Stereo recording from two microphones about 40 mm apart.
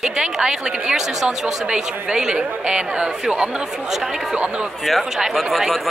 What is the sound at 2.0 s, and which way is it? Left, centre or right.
Speech, right.